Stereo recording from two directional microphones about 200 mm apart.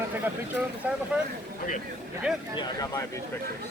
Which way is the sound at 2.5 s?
20° left (ahead or behind).